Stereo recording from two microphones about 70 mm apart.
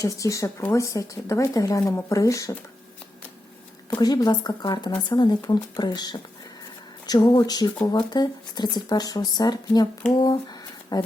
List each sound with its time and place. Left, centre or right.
0.0 s speech: left
4.0 s speech: left
7.1 s speech: left
10.9 s speech: left